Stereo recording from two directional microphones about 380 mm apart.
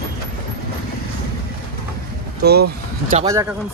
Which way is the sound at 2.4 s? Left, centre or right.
Right.